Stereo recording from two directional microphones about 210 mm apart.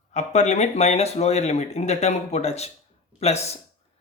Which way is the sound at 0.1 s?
35° left (ahead or behind).